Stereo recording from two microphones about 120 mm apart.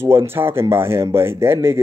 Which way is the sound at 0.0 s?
20° right (ahead or behind).